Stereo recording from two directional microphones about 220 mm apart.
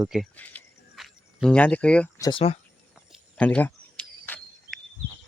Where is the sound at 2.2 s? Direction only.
25° left (ahead or behind).